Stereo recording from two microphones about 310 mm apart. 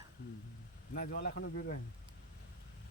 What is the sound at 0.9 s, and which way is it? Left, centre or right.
Speech, left.